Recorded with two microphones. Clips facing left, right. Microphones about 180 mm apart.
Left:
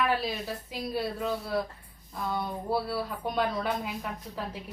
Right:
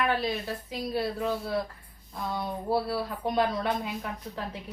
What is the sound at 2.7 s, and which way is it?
A woman's voice, centre (ahead or behind).